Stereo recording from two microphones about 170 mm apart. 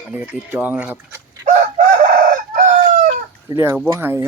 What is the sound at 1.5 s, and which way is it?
Chicken, 50° right (ahead or behind).